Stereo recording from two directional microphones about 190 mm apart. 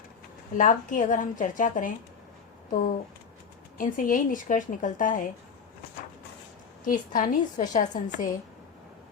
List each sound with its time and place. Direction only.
0.5 s a woman's voice: 40° left (ahead or behind)
3.8 s a woman's voice: 45° left (ahead or behind)
6.8 s a woman's voice: 45° left (ahead or behind)